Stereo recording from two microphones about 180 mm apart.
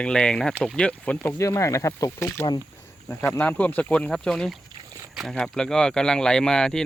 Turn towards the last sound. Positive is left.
turn(degrees=5)  # may be behind; listen again after turning